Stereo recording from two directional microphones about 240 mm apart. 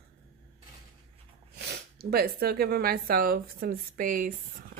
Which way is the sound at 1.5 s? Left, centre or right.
Right.